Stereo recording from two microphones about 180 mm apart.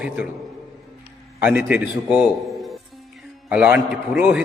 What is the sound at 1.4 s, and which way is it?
A man's voice, 5° right (ahead or behind).